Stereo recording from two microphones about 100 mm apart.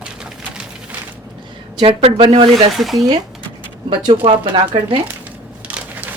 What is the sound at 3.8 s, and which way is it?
A man's voice, 55° right (ahead or behind).